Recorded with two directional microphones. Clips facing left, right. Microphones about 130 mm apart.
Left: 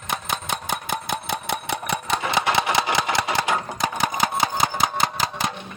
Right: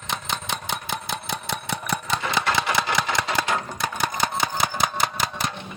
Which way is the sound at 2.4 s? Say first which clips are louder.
Left 2 dB; 15° left (ahead or behind).